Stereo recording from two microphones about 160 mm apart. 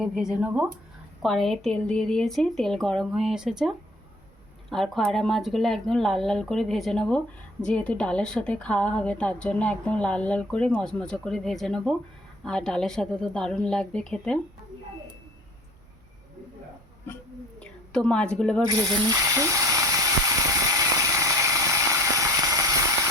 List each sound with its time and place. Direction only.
0.0 s speech: 5° right (ahead or behind)
1.2 s a woman's voice: centre (ahead or behind)
17.6 s a woman's voice: 5° left (ahead or behind)
18.6 s a sound: 25° right (ahead or behind)